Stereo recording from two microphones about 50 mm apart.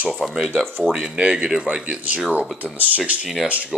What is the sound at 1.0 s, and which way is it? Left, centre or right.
Speech, centre.